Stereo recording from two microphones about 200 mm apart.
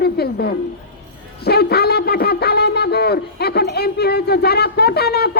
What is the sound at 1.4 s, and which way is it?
Shofar, 55° left (ahead or behind).